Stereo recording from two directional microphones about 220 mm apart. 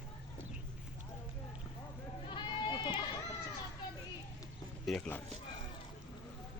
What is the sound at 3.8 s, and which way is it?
Children playing, 20° left (ahead or behind).